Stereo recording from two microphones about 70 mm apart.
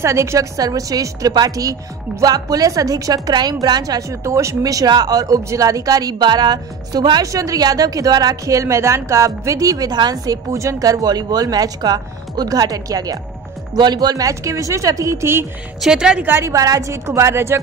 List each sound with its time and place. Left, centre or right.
0.0 s speech: right
0.6 s speech: right
4.1 s speech: right
4.8 s speech: right
7.2 s speech: right
13.7 s speech: right
15.8 s a woman's voice: centre
16.2 s a woman's voice: right
16.5 s speech: right